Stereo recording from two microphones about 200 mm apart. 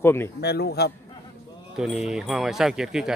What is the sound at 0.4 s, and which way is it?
Speech, 55° left (ahead or behind).